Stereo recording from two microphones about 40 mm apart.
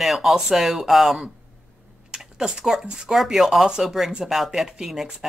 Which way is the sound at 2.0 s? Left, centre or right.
Right.